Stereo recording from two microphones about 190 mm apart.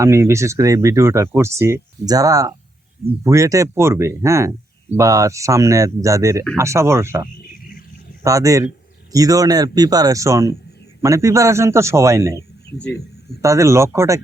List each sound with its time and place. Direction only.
0.0 s speech: 15° right (ahead or behind)
12.7 s hum: 60° left (ahead or behind)
13.4 s speech: 15° right (ahead or behind)